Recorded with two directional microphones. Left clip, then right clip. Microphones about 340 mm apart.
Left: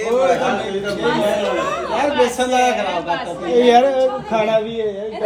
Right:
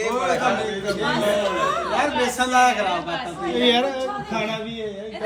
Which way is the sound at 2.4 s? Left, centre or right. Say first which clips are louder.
Left 1 dB; left.